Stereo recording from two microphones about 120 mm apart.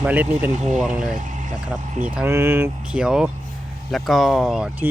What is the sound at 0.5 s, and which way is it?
Speech, 85° right.